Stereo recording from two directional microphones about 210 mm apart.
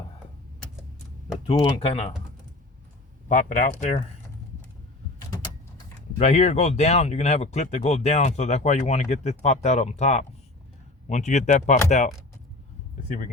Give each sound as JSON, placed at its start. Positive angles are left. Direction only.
{"t": 1.5, "sound": "speech", "side_deg": 30}
{"t": 3.2, "sound": "speech", "side_deg": 40}
{"t": 6.1, "sound": "speech", "side_deg": 30}